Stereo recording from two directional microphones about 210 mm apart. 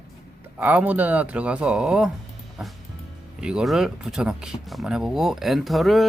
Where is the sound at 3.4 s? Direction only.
5° right (ahead or behind).